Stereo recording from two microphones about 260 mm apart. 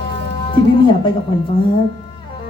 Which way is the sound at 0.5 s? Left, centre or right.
Centre.